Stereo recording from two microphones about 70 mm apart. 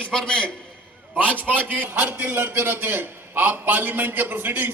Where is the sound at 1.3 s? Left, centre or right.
Right.